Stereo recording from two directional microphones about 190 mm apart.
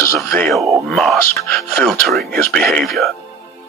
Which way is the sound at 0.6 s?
15° right (ahead or behind).